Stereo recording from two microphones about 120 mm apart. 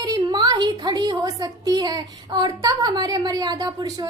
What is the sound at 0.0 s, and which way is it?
A woman's voice, 35° right (ahead or behind).